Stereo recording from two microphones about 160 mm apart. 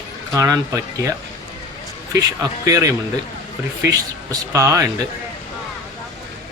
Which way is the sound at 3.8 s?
20° right (ahead or behind).